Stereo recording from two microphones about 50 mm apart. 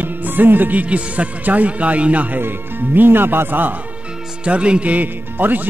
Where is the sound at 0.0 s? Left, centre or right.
Right.